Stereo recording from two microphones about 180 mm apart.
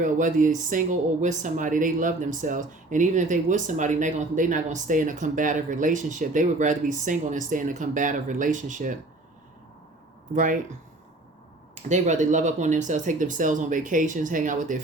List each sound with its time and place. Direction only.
0.0 s speech: 45° right (ahead or behind)
10.3 s speech: 45° right (ahead or behind)
11.7 s speech: 40° right (ahead or behind)